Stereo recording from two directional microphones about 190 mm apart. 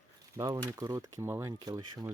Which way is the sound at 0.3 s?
15° right (ahead or behind).